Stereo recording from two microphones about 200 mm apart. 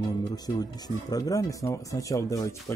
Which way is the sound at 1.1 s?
15° left (ahead or behind).